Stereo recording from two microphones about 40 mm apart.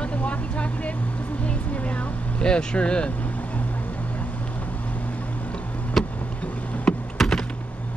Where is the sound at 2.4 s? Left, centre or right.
Left.